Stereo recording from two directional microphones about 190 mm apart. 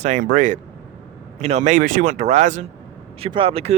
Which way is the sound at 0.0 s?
45° right (ahead or behind).